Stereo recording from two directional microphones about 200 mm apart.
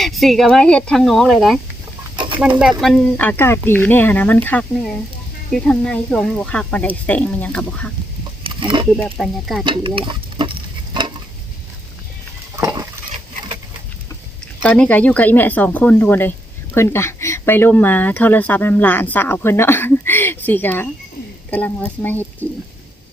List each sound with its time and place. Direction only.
0.0 s speech: centre (ahead or behind)
2.1 s a sound: 25° right (ahead or behind)
2.8 s speech: 5° left (ahead or behind)
8.4 s speech: 25° right (ahead or behind)
9.0 s speech: centre (ahead or behind)
9.6 s stir: 25° right (ahead or behind)
12.5 s dishes: 20° right (ahead or behind)
14.6 s speech: 5° left (ahead or behind)